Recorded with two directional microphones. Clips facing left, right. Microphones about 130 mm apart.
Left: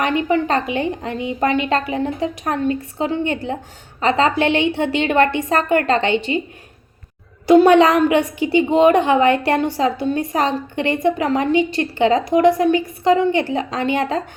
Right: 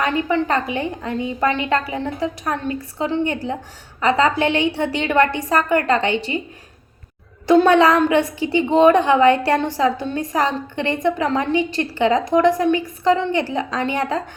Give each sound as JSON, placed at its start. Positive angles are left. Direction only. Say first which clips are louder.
{"t": 0.0, "sound": "a woman's voice", "louder": "left 2 dB", "side_deg": 20}
{"t": 7.4, "sound": "a woman's voice", "louder": "left 2 dB", "side_deg": 15}